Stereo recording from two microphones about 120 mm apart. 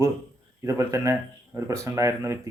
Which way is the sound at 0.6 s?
25° right (ahead or behind).